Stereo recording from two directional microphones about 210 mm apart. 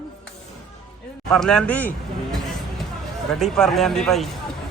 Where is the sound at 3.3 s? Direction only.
Centre (ahead or behind).